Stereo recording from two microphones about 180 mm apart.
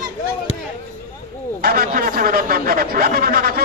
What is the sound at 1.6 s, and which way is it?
Speech, 55° right (ahead or behind).